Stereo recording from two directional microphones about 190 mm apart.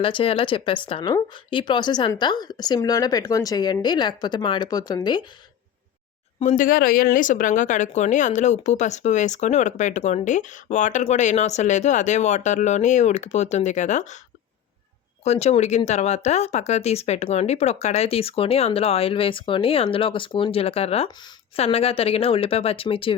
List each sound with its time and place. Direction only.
0.0 s a woman's voice: 30° left (ahead or behind)
6.4 s speech: 40° left (ahead or behind)
15.2 s speech: 35° left (ahead or behind)